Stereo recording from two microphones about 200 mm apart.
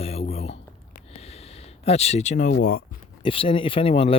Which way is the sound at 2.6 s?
45° left (ahead or behind).